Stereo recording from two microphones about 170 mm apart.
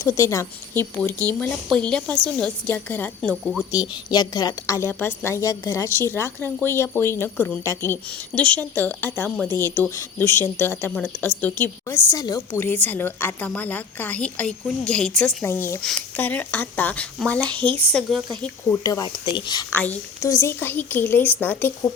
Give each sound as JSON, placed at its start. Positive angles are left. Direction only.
{"t": 0.0, "sound": "a woman's voice", "side_deg": 15}
{"t": 3.7, "sound": "a woman's voice", "side_deg": 20}
{"t": 12.5, "sound": "a woman's voice", "side_deg": 10}
{"t": 17.6, "sound": "speech", "side_deg": -30}
{"t": 17.9, "sound": "speech", "side_deg": 0}
{"t": 18.7, "sound": "speech", "side_deg": 20}
{"t": 19.7, "sound": "a woman's voice", "side_deg": 10}